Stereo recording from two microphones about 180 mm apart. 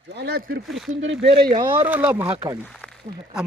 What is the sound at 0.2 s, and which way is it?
Speech, 65° right (ahead or behind).